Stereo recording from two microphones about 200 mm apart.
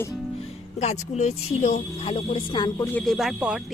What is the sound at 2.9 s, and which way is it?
Speech, centre (ahead or behind).